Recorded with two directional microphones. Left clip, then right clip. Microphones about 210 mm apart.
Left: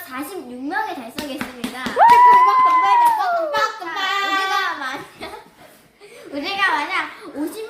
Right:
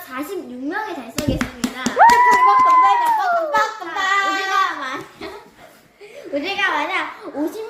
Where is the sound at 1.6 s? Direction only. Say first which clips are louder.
Right 3 dB; 40° right (ahead or behind).